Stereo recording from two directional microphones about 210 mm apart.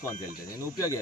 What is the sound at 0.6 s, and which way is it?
Speech, 15° left (ahead or behind).